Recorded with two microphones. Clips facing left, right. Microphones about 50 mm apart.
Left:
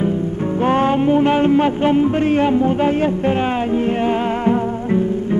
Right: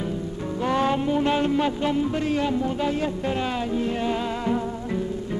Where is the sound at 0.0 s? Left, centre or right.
Left.